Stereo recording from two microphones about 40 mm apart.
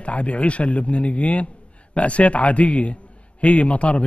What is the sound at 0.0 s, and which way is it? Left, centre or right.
A man's voice, left.